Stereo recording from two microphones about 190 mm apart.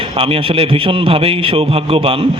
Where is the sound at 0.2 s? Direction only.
30° right (ahead or behind).